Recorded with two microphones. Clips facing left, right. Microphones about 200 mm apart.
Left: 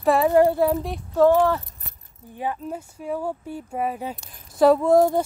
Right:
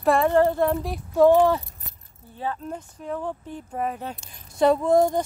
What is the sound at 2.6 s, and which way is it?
A woman's voice, 10° left (ahead or behind).